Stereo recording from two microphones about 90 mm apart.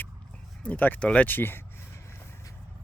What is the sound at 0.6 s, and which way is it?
Speech, 20° left (ahead or behind).